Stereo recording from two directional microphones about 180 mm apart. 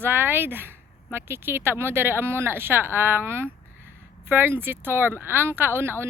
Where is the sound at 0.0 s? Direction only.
10° right (ahead or behind).